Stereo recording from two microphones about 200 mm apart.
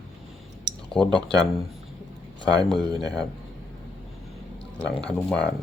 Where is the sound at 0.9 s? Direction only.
5° left (ahead or behind).